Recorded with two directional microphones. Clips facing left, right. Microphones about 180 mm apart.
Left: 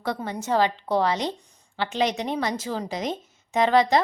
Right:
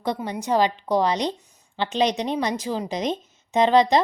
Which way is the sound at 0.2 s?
15° right (ahead or behind).